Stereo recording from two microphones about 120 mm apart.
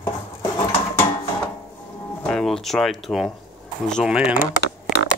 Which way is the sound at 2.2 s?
5° left (ahead or behind).